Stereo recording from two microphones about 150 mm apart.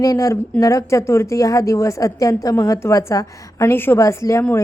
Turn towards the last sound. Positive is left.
turn(degrees=20)  # may be behind; listen again after turning